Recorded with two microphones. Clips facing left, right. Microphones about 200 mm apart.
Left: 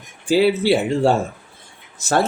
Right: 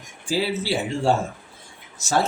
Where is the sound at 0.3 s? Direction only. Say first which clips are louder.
Left 9 dB; 65° left (ahead or behind).